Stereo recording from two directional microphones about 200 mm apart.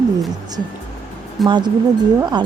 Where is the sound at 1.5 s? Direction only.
20° right (ahead or behind).